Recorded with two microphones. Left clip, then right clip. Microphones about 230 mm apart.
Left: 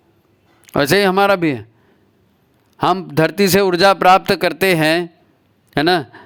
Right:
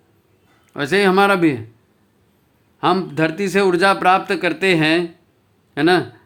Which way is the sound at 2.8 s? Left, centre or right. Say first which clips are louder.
Left 2 dB; left.